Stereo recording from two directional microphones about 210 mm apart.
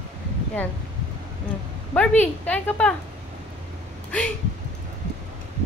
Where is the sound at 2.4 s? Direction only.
5° left (ahead or behind).